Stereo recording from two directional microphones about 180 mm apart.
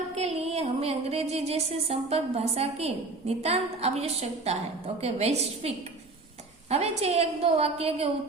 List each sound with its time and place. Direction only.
0.1 s music: 35° right (ahead or behind)